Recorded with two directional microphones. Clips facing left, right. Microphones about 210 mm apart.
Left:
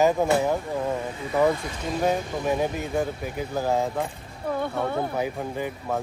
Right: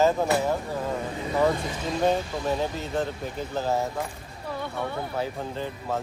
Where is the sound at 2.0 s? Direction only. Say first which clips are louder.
Even; 10° left (ahead or behind).